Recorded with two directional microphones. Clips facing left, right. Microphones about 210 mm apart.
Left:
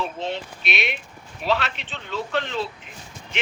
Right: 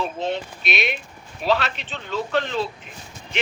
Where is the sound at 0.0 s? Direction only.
45° right (ahead or behind).